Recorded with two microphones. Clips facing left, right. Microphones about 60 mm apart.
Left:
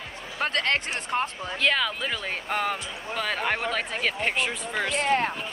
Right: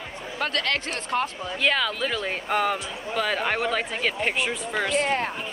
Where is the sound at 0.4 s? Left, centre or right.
Left.